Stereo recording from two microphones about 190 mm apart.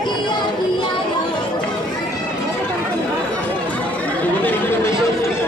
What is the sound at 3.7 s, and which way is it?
Chatter, 5° left (ahead or behind).